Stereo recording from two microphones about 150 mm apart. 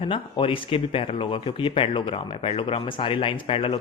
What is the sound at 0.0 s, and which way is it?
Speech, 35° left (ahead or behind).